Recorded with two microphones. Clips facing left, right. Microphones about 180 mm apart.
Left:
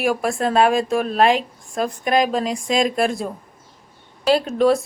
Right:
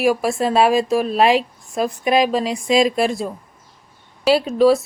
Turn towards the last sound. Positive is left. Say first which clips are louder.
# right 3 dB
turn(degrees=0)  # may be behind; listen again after turning